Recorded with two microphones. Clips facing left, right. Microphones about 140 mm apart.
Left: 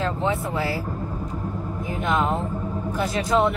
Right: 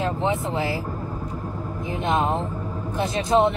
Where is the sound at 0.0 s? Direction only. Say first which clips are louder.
Right 1 dB; 20° right (ahead or behind).